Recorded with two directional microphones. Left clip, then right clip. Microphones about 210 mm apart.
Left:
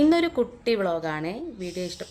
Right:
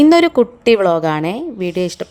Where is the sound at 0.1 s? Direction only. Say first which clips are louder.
Right 11 dB; 35° right (ahead or behind).